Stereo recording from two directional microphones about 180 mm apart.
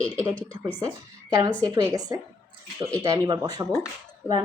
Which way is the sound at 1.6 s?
20° right (ahead or behind).